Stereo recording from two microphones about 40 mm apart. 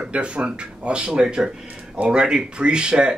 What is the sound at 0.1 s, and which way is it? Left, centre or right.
Speech, right.